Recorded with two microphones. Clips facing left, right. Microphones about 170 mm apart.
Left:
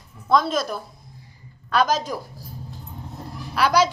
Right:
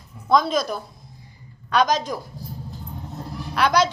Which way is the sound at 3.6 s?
5° left (ahead or behind).